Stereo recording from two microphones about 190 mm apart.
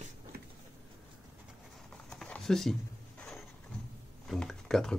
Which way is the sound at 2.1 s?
Centre (ahead or behind).